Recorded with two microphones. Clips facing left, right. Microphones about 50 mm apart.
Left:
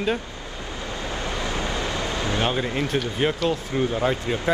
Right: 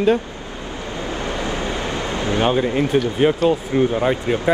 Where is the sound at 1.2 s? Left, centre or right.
Right.